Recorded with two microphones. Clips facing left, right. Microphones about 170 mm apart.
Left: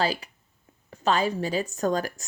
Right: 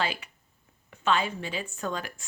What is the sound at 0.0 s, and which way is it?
Speech, 35° left (ahead or behind).